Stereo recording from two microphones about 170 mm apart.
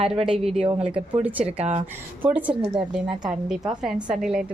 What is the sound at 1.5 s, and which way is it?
Speech, 35° right (ahead or behind).